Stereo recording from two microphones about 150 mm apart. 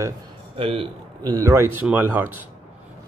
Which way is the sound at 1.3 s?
20° right (ahead or behind).